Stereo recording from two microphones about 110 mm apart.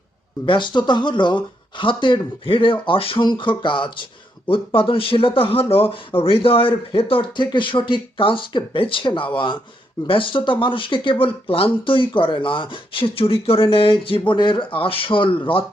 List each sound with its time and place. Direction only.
0.4 s speech: 45° left (ahead or behind)